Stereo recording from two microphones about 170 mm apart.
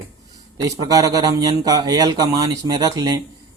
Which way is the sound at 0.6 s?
20° right (ahead or behind).